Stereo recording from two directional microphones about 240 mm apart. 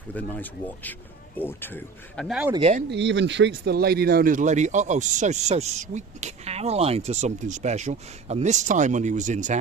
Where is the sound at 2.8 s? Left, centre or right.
Right.